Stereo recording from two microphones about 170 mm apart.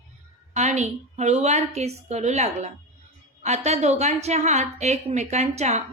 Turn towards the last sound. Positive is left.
turn(degrees=-40)  # may be behind; listen again after turning